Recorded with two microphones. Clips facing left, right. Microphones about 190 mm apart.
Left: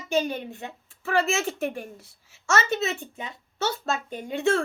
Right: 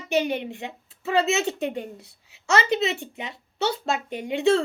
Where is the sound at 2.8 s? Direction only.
20° right (ahead or behind).